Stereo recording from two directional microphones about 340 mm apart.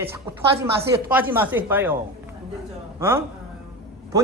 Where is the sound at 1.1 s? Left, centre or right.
Centre.